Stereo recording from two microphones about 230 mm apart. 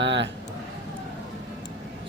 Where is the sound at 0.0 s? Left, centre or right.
Right.